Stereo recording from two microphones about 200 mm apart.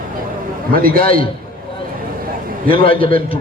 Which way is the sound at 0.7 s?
45° right (ahead or behind).